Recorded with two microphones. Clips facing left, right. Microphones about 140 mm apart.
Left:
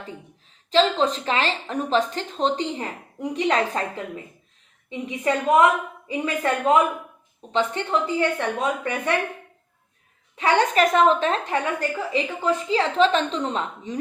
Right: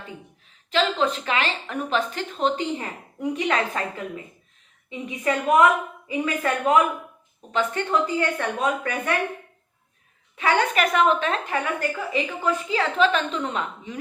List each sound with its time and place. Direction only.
0.7 s a woman's voice: 30° left (ahead or behind)
10.3 s a woman's voice: 35° left (ahead or behind)